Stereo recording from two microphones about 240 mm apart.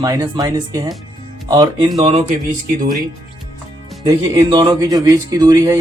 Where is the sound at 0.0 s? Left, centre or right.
Centre.